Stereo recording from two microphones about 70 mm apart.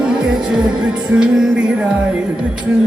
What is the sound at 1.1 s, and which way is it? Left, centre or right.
Music, centre.